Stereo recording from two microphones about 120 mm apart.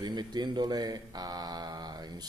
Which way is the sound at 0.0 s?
35° right (ahead or behind).